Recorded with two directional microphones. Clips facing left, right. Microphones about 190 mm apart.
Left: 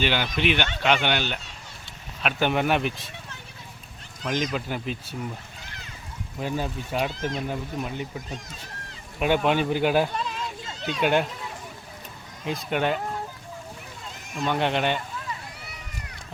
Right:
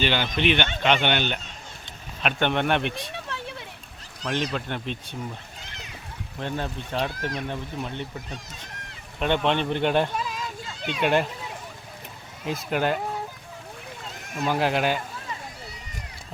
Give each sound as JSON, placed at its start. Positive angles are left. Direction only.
{"t": 0.0, "sound": "a man's voice", "side_deg": 10}
{"t": 2.9, "sound": "a sound", "side_deg": -70}
{"t": 4.5, "sound": "speech", "side_deg": 5}
{"t": 6.4, "sound": "speech", "side_deg": 5}
{"t": 7.1, "sound": "speech", "side_deg": 25}
{"t": 7.4, "sound": "a man's voice", "side_deg": 5}
{"t": 10.2, "sound": "a sound", "side_deg": -5}
{"t": 10.9, "sound": "speech", "side_deg": 0}
{"t": 12.5, "sound": "speech", "side_deg": 0}
{"t": 14.3, "sound": "speech", "side_deg": -5}